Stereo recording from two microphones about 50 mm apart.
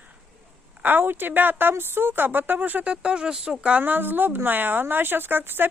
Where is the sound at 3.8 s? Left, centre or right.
Right.